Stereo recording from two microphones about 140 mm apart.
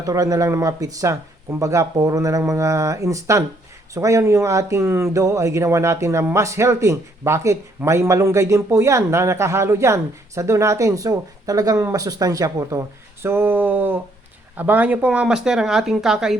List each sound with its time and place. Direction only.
0.0 s speech: 25° right (ahead or behind)
13.2 s a sound: 15° right (ahead or behind)
14.5 s speech: 10° right (ahead or behind)